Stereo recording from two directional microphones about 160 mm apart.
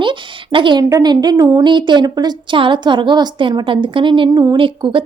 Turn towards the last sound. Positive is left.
turn(degrees=-30)  # may be behind; listen again after turning